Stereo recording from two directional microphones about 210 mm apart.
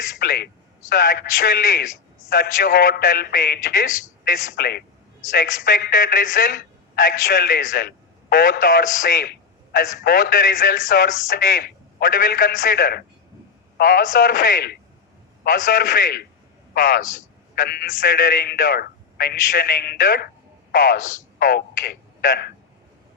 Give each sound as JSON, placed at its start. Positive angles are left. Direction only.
{"t": 0.2, "sound": "a woman's voice", "side_deg": 50}